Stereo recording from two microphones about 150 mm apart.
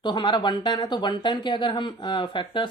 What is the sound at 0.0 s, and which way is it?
Speech, 30° left (ahead or behind).